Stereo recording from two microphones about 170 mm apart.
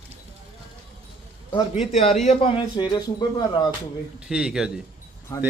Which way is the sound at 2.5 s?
25° left (ahead or behind).